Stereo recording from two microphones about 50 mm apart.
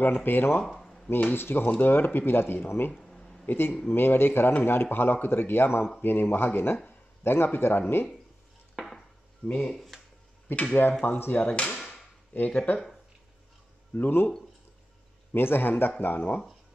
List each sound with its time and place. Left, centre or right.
0.0 s speech: left
0.7 s a sound: centre
1.3 s speech: left
3.1 s a sound: centre
3.4 s a man's voice: left
8.7 s dishes: centre
9.7 s speech: centre
10.5 s speech: left
11.1 s speech: left
11.5 s speech: left
13.9 s speech: left
15.3 s speech: left